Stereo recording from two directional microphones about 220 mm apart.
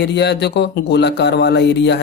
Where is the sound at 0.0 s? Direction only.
50° left (ahead or behind).